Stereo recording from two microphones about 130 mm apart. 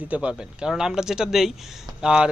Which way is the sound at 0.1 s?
10° right (ahead or behind).